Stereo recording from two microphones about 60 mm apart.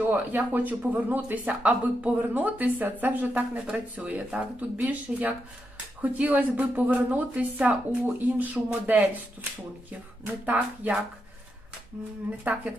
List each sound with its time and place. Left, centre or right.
0.0 s speech: right
12.5 s speech: right